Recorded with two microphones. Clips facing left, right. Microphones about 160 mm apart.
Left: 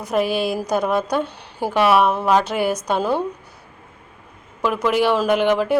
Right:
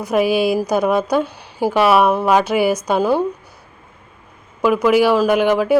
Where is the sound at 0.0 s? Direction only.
10° right (ahead or behind).